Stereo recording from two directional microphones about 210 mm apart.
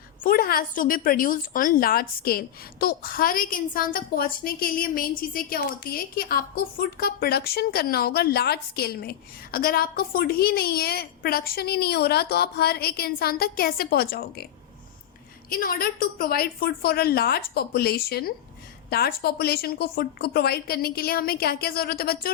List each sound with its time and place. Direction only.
0.2 s a woman's voice: 40° left (ahead or behind)
15.4 s a woman's voice: 45° left (ahead or behind)